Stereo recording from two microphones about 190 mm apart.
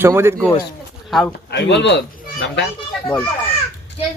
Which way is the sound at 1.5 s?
65° left (ahead or behind).